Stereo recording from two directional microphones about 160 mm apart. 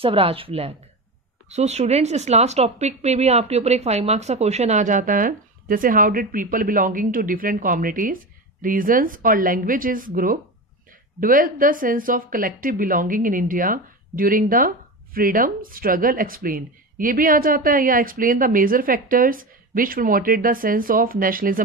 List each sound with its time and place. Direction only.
0.0 s speech: 35° right (ahead or behind); by 21.6 s 60° right (ahead or behind)